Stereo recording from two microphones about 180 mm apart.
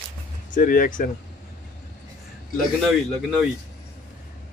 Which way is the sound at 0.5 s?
50° left (ahead or behind).